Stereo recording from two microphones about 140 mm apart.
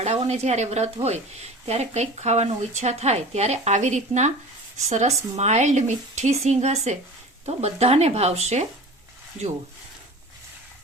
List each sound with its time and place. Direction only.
0.0 s speech: 50° right (ahead or behind)